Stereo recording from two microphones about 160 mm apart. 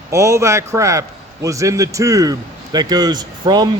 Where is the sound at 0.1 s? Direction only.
20° right (ahead or behind).